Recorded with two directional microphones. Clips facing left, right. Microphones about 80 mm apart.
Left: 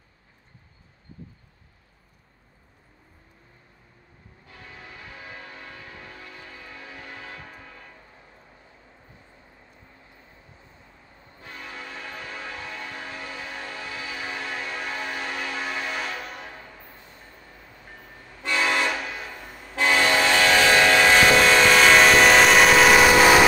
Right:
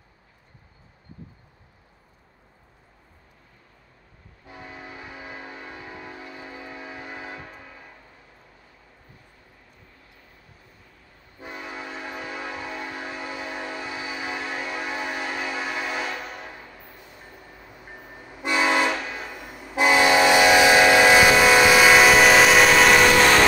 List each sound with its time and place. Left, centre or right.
4.5 s train: centre
10.1 s vehicle: left
11.3 s train: centre
16.5 s train: centre
18.9 s train: centre